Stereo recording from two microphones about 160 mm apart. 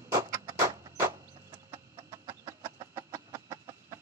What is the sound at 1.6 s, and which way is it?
Chicken, 25° right (ahead or behind).